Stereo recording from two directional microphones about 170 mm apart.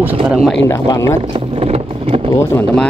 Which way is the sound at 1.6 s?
35° right (ahead or behind).